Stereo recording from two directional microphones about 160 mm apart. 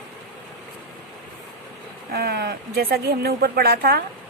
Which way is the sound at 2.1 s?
80° right.